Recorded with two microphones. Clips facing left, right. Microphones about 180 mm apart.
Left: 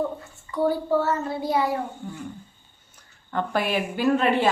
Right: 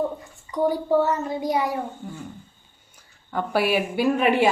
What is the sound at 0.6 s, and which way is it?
A woman's voice, 15° right (ahead or behind).